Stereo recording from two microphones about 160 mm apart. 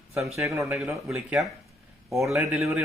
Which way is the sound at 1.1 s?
Centre (ahead or behind).